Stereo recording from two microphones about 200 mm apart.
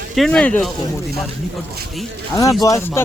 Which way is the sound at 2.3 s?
15° left (ahead or behind).